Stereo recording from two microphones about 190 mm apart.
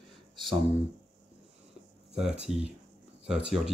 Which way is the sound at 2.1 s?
5° right (ahead or behind).